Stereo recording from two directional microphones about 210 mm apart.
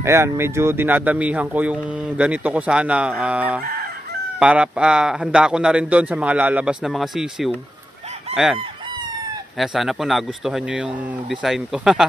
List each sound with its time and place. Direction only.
0.0 s a man's voice: 15° right (ahead or behind)
8.3 s chicken: 30° right (ahead or behind)
9.6 s a man's voice: centre (ahead or behind)